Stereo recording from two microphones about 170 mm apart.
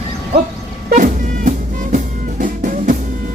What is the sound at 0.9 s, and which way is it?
Music, 50° right (ahead or behind).